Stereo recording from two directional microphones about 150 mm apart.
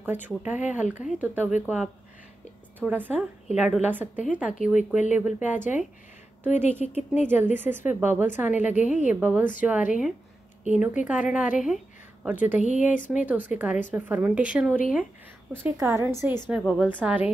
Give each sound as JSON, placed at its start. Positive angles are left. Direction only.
{"t": 0.0, "sound": "a woman's voice", "side_deg": -15}
{"t": 4.7, "sound": "speech", "side_deg": 55}
{"t": 5.1, "sound": "a woman's voice", "side_deg": -10}
{"t": 8.7, "sound": "speech", "side_deg": 55}
{"t": 9.1, "sound": "a woman's voice", "side_deg": -10}
{"t": 11.6, "sound": "a sound", "side_deg": -5}
{"t": 12.5, "sound": "speech", "side_deg": 55}
{"t": 13.1, "sound": "a woman's voice", "side_deg": -10}
{"t": 15.6, "sound": "a woman's voice", "side_deg": -20}